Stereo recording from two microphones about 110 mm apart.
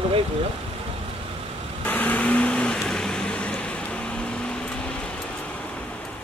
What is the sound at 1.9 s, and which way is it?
Vehicle, 15° left (ahead or behind).